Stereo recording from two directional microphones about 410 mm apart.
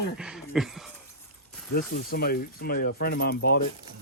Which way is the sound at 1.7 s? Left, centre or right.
Left.